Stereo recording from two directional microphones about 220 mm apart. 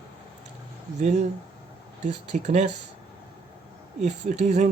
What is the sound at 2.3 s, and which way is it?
Speech, 30° right (ahead or behind).